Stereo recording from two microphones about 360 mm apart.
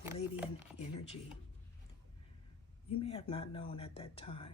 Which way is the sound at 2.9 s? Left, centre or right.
Centre.